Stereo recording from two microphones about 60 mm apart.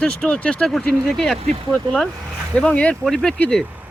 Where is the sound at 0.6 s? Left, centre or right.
Centre.